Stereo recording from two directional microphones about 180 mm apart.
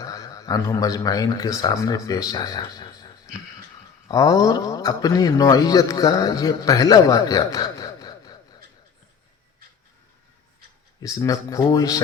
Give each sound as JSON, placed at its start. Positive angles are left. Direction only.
{"t": 0.0, "sound": "speech", "side_deg": 20}
{"t": 4.1, "sound": "speech", "side_deg": 20}
{"t": 11.0, "sound": "speech", "side_deg": 20}